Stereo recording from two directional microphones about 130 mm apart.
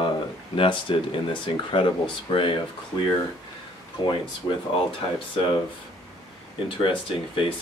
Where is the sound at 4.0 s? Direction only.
30° left (ahead or behind).